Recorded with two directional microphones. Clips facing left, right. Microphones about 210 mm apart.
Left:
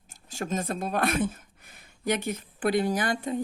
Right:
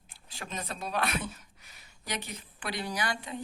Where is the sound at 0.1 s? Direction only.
45° left (ahead or behind).